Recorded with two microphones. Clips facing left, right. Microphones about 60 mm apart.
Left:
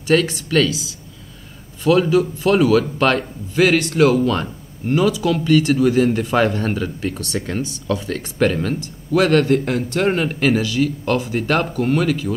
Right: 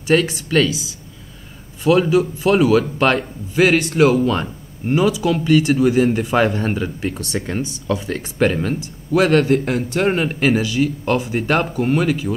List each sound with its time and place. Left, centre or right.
0.0 s a man's voice: centre
1.8 s a man's voice: centre